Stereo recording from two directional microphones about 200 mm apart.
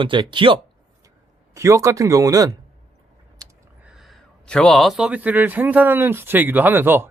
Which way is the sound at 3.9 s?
Centre (ahead or behind).